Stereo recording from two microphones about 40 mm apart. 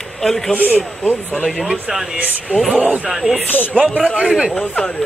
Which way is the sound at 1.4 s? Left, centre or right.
Centre.